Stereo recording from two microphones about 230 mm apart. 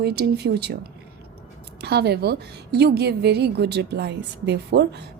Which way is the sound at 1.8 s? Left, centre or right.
Right.